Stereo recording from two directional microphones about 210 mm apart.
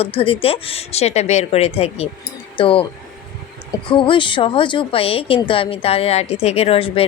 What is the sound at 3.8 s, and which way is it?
Speech, 25° left (ahead or behind).